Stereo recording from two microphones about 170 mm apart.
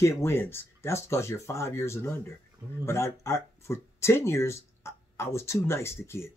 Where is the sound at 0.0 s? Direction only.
15° left (ahead or behind).